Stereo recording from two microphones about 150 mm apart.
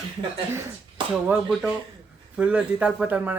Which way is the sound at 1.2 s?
5° right (ahead or behind).